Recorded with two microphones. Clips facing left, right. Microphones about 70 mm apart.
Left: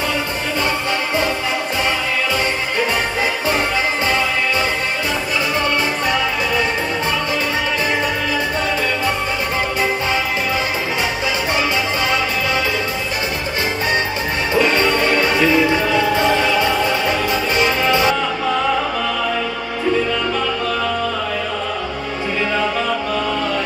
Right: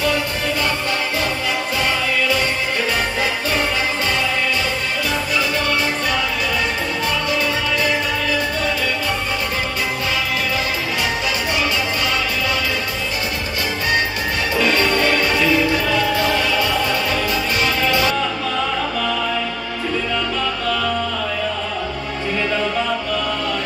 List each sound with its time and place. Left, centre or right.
14.5 s music: left